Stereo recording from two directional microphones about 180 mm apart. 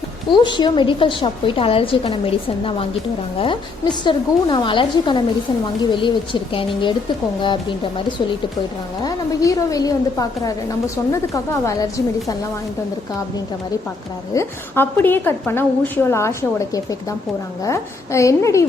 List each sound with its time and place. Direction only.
0.3 s a woman's voice: 25° left (ahead or behind)
9.0 s a woman's voice: 20° left (ahead or behind)
14.3 s a woman's voice: 10° left (ahead or behind)